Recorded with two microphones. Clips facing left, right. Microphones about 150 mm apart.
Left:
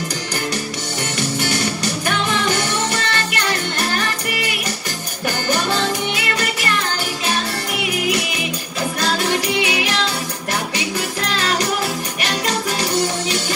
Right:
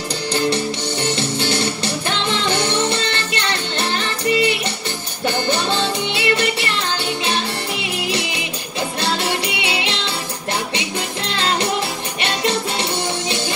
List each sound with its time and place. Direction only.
1.1 s music: 25° right (ahead or behind)
9.0 s music: 25° right (ahead or behind)
11.3 s music: 25° right (ahead or behind)